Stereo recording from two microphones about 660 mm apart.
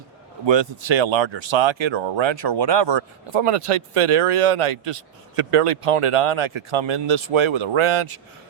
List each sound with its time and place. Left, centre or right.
0.4 s a man's voice: right